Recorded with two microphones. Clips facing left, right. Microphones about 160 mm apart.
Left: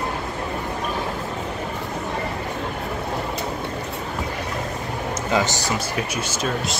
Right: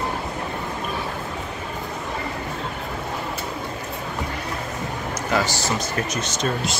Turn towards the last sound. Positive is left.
turn(degrees=0)  # may be behind; listen again after turning